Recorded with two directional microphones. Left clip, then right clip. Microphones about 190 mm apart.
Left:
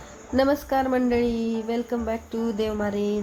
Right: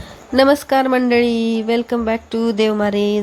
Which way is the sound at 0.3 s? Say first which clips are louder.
Right 9 dB; 20° right (ahead or behind).